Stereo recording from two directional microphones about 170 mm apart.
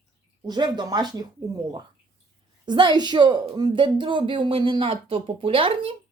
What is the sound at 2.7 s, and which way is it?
A woman's voice, 25° right (ahead or behind).